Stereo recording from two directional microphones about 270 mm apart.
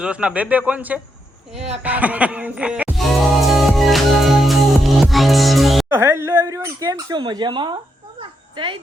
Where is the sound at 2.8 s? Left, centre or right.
Centre.